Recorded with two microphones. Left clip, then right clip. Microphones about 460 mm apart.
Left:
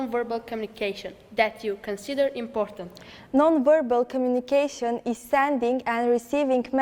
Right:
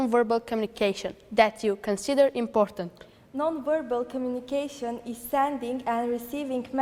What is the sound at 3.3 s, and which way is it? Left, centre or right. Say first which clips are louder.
A woman's voice: left 8 dB; left.